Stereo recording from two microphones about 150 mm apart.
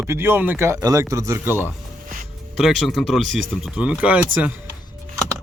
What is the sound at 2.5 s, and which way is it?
Speech, centre (ahead or behind).